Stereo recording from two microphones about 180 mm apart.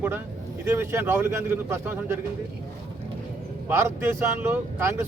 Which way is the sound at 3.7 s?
15° right (ahead or behind).